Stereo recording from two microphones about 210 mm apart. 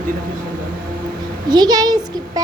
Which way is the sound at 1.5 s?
20° right (ahead or behind).